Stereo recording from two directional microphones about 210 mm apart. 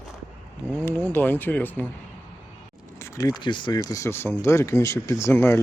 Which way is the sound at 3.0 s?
15° left (ahead or behind).